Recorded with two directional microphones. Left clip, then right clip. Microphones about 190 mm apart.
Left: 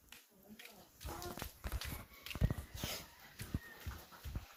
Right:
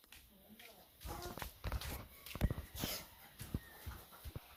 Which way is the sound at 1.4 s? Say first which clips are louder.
Right 1 dB; 35° left (ahead or behind).